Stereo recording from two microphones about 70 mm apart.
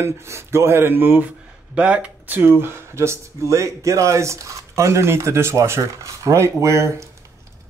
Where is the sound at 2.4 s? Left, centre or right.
Right.